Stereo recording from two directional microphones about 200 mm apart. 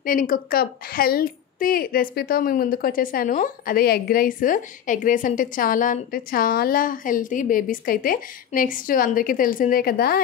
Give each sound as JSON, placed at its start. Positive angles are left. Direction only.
{"t": 0.0, "sound": "a woman's voice", "side_deg": 45}